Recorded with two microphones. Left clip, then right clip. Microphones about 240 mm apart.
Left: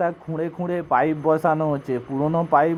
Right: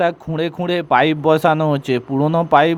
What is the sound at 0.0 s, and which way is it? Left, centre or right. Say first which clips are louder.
Speech: right 6 dB; right.